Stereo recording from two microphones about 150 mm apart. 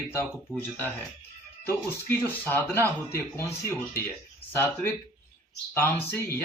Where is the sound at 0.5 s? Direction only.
20° right (ahead or behind).